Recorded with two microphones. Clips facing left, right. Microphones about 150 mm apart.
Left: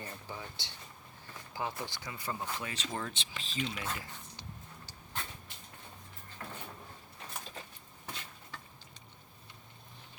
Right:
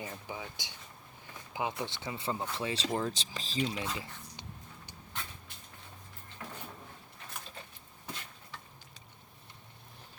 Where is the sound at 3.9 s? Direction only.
25° right (ahead or behind).